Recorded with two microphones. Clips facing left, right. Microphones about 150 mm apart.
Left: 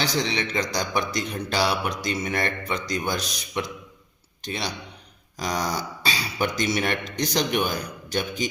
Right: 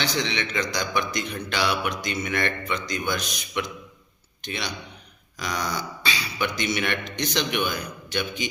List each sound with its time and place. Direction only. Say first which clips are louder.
0.0 s a man's voice: left 2 dB; 35° left (ahead or behind)